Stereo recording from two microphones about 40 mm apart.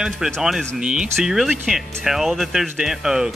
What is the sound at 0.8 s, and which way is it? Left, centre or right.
Speech, right.